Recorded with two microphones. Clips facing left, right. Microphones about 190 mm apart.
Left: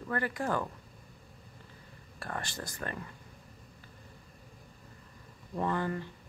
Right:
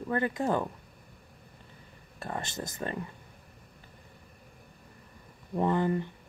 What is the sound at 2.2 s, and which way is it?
Speech, 20° right (ahead or behind).